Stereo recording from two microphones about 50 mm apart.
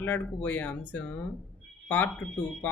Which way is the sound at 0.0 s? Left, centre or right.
Left.